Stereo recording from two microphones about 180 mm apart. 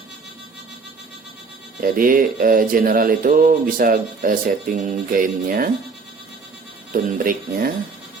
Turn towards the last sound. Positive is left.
turn(degrees=-50)  # may be behind; listen again after turning